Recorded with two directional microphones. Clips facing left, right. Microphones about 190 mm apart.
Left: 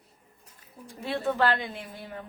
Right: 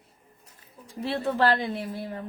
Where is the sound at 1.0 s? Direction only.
35° right (ahead or behind).